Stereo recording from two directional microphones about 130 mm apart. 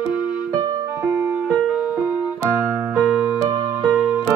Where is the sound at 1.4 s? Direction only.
10° right (ahead or behind).